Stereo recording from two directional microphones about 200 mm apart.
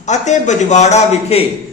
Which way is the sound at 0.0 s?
35° left (ahead or behind).